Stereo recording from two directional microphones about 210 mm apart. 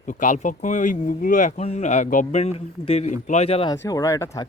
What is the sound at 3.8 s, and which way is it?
Speech, 15° left (ahead or behind).